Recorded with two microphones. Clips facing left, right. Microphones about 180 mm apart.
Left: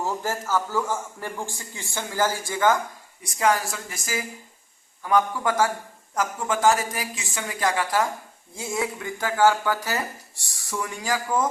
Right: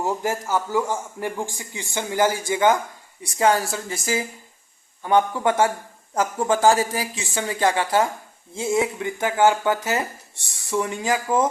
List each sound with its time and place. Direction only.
0.0 s a man's voice: 15° right (ahead or behind)
3.2 s speech: 30° right (ahead or behind)